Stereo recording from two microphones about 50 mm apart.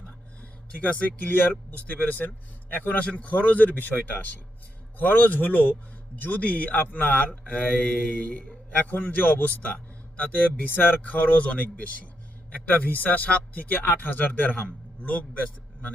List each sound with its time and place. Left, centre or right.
0.8 s speech: left
3.0 s speech: left